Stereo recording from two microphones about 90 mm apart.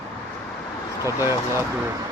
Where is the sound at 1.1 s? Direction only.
25° right (ahead or behind).